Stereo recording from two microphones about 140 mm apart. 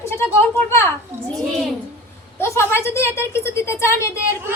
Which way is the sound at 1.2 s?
5° left (ahead or behind).